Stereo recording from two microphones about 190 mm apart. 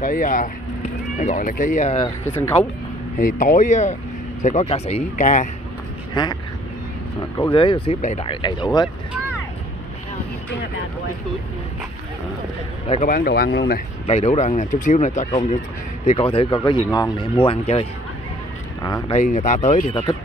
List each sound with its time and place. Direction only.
0.0 s speech: 45° left (ahead or behind)
2.2 s speech: 15° left (ahead or behind)
3.2 s speech: 45° left (ahead or behind)
6.2 s speech: 25° left (ahead or behind)
7.5 s speech: 25° left (ahead or behind)
8.8 s speech: 5° right (ahead or behind)
13.0 s speech: 50° left (ahead or behind)
14.0 s speech: 35° left (ahead or behind)
19.1 s speech: 40° left (ahead or behind)